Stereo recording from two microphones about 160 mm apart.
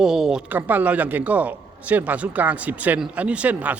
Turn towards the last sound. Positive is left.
turn(degrees=-10)  # may be behind; listen again after turning